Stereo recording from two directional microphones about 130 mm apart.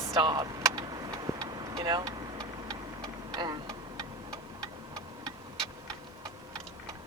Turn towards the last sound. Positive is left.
turn(degrees=-25)  # may be behind; listen again after turning